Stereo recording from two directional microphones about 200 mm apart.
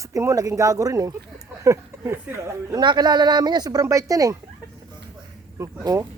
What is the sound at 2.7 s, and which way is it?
Speech, 20° right (ahead or behind).